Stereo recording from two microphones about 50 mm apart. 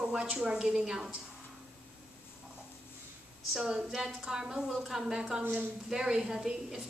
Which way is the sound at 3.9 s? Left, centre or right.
Centre.